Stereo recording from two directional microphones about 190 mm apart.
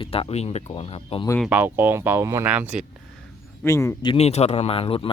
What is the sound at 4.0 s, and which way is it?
Speech, 30° left (ahead or behind).